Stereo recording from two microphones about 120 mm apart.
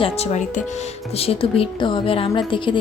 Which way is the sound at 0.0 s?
60° left (ahead or behind).